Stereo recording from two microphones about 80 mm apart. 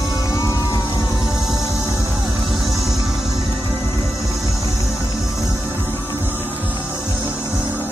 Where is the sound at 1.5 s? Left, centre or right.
Right.